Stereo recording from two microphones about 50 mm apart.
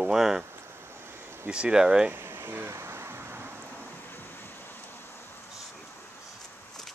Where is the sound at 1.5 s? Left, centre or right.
Centre.